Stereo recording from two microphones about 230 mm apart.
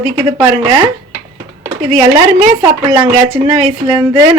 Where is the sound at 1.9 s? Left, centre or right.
Centre.